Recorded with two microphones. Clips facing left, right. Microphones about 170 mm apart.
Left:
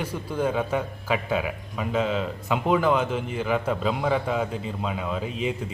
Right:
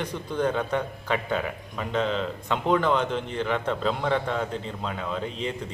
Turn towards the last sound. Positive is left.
turn(degrees=5)  # may be behind; listen again after turning